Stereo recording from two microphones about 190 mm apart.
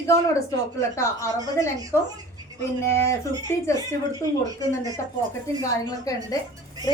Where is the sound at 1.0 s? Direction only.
15° left (ahead or behind).